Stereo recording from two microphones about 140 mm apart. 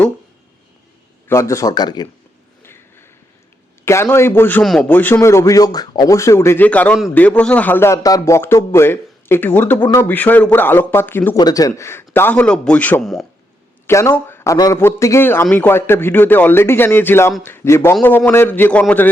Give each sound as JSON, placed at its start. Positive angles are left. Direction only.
{"t": 1.3, "sound": "speech", "side_deg": 20}
{"t": 2.6, "sound": "a sound", "side_deg": 15}
{"t": 3.8, "sound": "a man's voice", "side_deg": 20}
{"t": 11.3, "sound": "a man's voice", "side_deg": 25}
{"t": 13.8, "sound": "a man's voice", "side_deg": 20}